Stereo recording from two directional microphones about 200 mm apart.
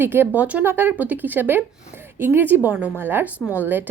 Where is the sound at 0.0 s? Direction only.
10° right (ahead or behind).